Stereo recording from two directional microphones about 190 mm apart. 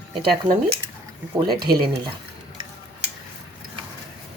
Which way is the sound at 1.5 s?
55° right (ahead or behind).